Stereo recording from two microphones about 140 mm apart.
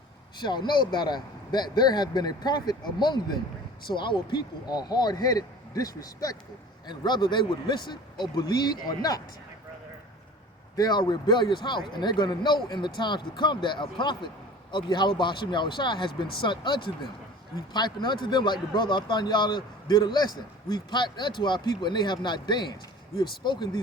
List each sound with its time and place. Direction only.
0.4 s a man's voice: 30° left (ahead or behind)
10.8 s speech: 30° left (ahead or behind)